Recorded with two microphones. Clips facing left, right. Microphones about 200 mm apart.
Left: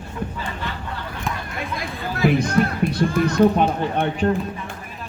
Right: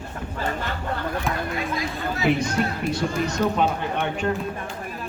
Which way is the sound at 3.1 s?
55° left (ahead or behind).